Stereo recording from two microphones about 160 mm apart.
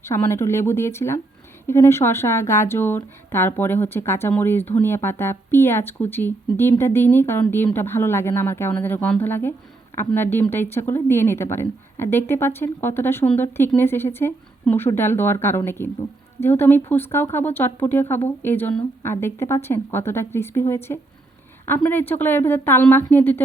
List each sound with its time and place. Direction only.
0.0 s speech: 15° left (ahead or behind)